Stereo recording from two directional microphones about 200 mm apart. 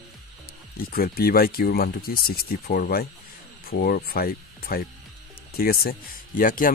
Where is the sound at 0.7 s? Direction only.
50° left (ahead or behind).